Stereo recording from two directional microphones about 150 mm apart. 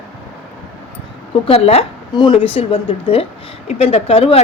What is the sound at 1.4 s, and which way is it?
A woman's voice, 40° left (ahead or behind).